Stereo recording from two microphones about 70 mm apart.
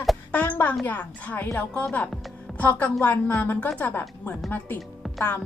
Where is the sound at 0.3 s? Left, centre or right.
Left.